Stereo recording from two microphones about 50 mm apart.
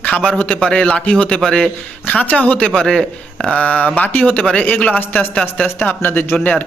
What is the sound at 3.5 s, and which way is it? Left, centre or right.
Speech, left.